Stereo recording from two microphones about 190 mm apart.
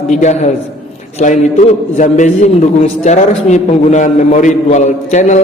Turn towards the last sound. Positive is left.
turn(degrees=40)  # may be behind; listen again after turning